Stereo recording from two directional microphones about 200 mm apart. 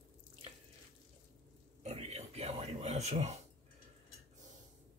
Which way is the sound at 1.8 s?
30° right (ahead or behind).